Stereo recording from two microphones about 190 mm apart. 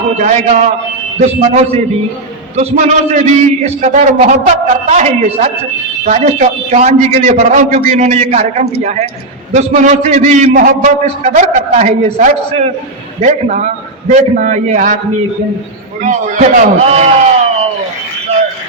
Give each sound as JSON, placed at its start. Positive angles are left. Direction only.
{"t": 0.2, "sound": "a man's voice", "side_deg": -40}
{"t": 16.0, "sound": "a man's voice", "side_deg": -40}